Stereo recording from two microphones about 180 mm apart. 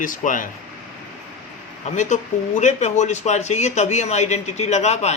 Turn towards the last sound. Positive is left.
turn(degrees=40)  # may be behind; listen again after turning